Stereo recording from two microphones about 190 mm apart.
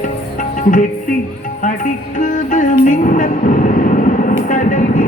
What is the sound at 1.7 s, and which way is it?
Music, 45° left (ahead or behind).